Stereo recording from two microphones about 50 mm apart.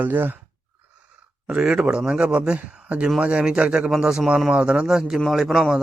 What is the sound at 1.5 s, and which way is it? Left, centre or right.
Speech, centre.